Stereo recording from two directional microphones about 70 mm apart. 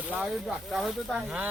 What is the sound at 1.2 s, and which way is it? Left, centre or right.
Speech, centre.